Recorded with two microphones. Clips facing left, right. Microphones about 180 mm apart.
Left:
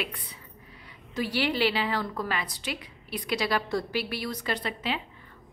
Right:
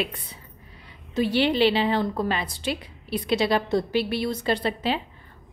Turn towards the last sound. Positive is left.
turn(degrees=-30)  # may be behind; listen again after turning